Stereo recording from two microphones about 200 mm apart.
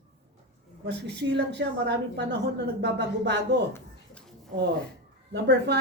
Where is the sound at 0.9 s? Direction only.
55° right (ahead or behind).